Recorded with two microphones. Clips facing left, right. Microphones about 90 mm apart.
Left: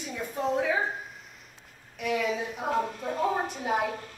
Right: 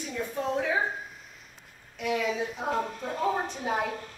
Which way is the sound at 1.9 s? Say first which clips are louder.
Even; 5° left (ahead or behind).